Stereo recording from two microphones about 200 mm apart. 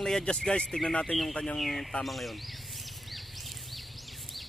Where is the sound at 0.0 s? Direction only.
5° left (ahead or behind).